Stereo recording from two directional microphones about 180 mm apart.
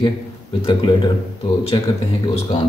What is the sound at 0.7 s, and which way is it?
Speech, 30° left (ahead or behind).